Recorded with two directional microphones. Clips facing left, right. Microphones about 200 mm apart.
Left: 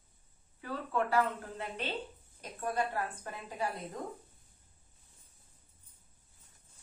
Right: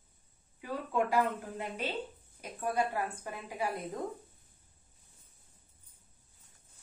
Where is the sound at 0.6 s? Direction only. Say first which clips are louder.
Right 2 dB; 15° right (ahead or behind).